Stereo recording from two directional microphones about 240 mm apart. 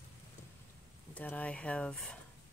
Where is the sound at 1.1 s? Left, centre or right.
Centre.